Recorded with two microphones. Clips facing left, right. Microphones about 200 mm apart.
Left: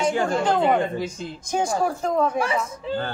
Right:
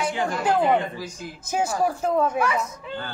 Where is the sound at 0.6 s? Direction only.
25° left (ahead or behind).